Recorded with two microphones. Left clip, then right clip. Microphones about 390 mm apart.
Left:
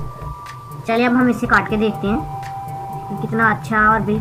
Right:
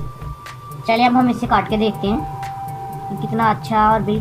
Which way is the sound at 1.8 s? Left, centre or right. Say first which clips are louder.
Even; centre.